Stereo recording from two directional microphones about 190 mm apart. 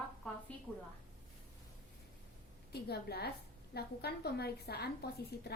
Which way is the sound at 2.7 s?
55° left (ahead or behind).